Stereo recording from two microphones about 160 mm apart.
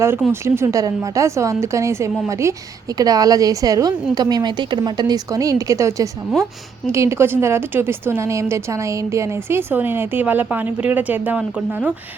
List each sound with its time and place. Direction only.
0.3 s a woman's voice: 15° right (ahead or behind)